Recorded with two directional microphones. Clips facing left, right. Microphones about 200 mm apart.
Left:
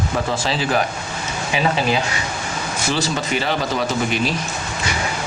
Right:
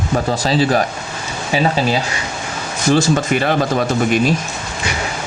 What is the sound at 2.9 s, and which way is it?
Speech, 50° right (ahead or behind).